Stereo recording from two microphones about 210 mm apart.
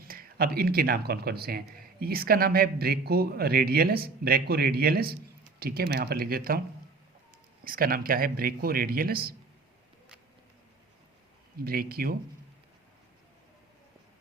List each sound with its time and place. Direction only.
0.0 s speech: 45° right (ahead or behind)
7.6 s speech: 45° right (ahead or behind)
11.5 s speech: 45° right (ahead or behind)